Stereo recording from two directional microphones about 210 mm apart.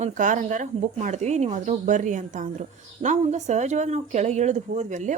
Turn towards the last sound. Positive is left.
turn(degrees=-35)  # may be behind; listen again after turning